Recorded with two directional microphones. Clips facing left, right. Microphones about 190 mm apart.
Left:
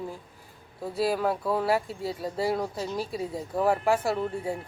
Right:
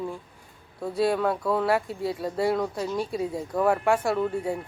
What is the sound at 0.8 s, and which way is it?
Speech, centre (ahead or behind).